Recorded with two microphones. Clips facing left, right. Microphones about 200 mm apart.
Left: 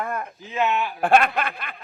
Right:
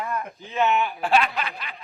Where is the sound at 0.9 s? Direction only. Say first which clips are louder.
Left 4 dB; 55° left (ahead or behind).